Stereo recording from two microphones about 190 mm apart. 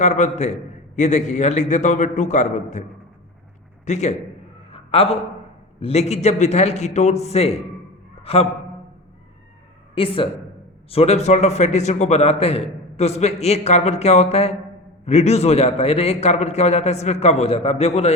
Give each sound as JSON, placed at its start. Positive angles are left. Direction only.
{"t": 0.0, "sound": "a man's voice", "side_deg": 35}
{"t": 3.8, "sound": "a man's voice", "side_deg": 35}
{"t": 4.7, "sound": "a sound", "side_deg": 30}
{"t": 5.8, "sound": "a man's voice", "side_deg": 35}
{"t": 9.9, "sound": "a man's voice", "side_deg": 30}